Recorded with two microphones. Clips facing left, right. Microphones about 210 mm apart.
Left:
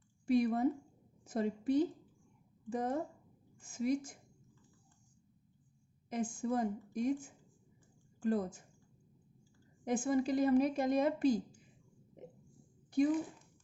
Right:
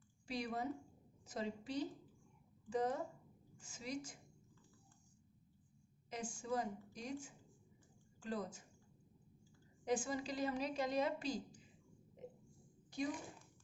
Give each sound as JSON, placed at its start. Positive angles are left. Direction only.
{"t": 0.3, "sound": "a woman's voice", "side_deg": 55}
{"t": 6.1, "sound": "a woman's voice", "side_deg": 55}
{"t": 9.8, "sound": "a woman's voice", "side_deg": 55}